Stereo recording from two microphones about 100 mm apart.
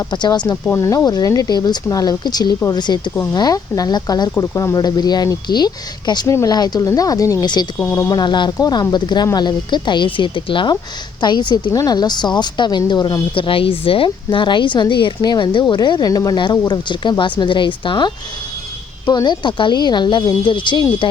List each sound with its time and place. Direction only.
0.1 s speech: 45° left (ahead or behind)
0.8 s speech: 35° left (ahead or behind)
6.2 s speech: 35° left (ahead or behind)
7.4 s speech: 45° left (ahead or behind)
11.7 s speech: 40° left (ahead or behind)
13.3 s speech: 60° left (ahead or behind)